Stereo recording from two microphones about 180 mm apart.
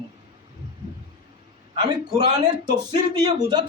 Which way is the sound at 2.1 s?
25° right (ahead or behind).